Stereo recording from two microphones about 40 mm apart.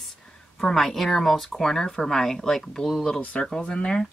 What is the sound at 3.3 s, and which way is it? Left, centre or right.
Speech, left.